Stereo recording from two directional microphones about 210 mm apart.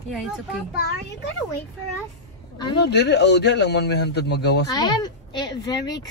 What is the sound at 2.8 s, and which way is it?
A man's voice, 55° left (ahead or behind).